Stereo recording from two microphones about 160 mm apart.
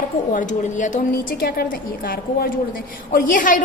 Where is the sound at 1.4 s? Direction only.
70° left (ahead or behind).